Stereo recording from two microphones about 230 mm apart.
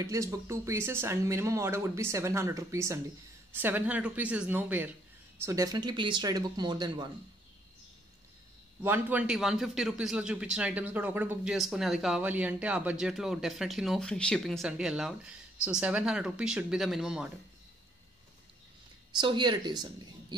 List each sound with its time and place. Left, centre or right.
0.0 s speech: centre
8.8 s a man's voice: centre
19.1 s speech: centre